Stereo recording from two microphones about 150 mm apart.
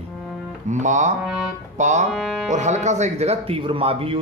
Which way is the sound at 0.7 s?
55° right (ahead or behind).